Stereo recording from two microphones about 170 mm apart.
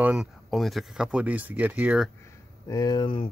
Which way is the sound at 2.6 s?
25° left (ahead or behind).